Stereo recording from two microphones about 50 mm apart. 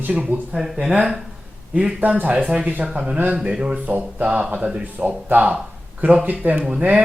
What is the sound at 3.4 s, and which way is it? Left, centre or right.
Speech, right.